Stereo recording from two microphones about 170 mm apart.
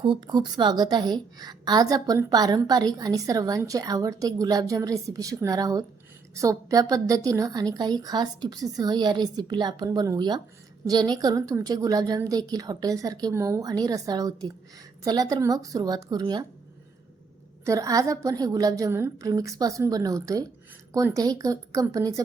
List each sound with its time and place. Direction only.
0.3 s a woman's voice: 25° right (ahead or behind)
17.7 s a woman's voice: 20° right (ahead or behind)